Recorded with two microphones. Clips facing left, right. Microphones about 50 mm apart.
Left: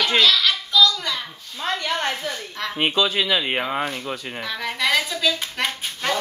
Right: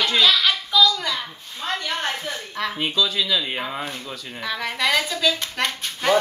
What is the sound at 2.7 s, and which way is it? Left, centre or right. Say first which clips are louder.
Speech: left 4 dB; left.